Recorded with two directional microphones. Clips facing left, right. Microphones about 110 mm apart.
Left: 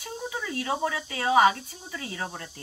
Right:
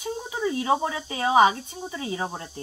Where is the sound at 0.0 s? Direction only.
20° right (ahead or behind).